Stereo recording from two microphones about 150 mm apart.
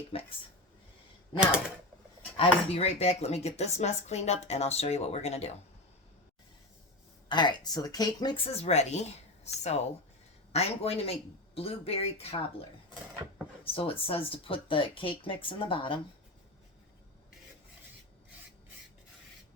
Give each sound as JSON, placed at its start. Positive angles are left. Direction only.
{"t": 0.1, "sound": "speech", "side_deg": 40}
{"t": 1.4, "sound": "speech", "side_deg": -5}
{"t": 2.4, "sound": "speech", "side_deg": 45}
{"t": 7.3, "sound": "speech", "side_deg": 30}
{"t": 8.4, "sound": "speech", "side_deg": 45}
{"t": 13.7, "sound": "speech", "side_deg": 40}